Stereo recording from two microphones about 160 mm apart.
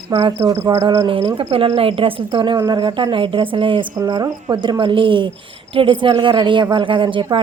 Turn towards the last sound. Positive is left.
turn(degrees=-30)  # may be behind; listen again after turning